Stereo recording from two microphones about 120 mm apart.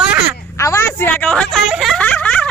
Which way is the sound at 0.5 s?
25° left (ahead or behind).